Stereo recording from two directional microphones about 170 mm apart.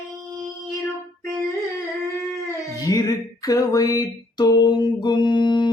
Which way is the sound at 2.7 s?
20° left (ahead or behind).